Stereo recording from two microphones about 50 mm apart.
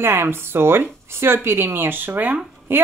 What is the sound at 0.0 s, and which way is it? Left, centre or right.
Speech, right.